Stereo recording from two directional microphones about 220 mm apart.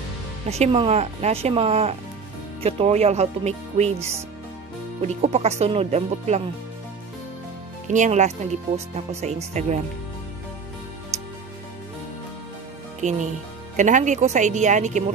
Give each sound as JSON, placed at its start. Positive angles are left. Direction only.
{"t": 0.5, "sound": "speech", "side_deg": -25}
{"t": 7.9, "sound": "speech", "side_deg": -35}
{"t": 13.0, "sound": "speech", "side_deg": -35}